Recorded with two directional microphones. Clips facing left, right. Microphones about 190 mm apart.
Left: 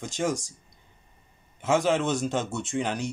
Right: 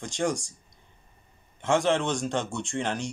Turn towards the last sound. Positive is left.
turn(degrees=0)  # may be behind; listen again after turning